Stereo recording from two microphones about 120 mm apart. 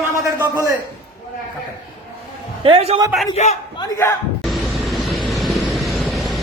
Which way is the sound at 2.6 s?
50° right (ahead or behind).